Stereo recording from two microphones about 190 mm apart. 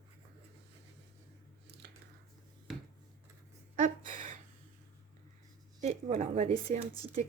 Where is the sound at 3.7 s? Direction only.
45° right (ahead or behind).